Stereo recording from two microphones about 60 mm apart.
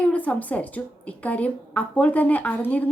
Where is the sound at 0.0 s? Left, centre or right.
Left.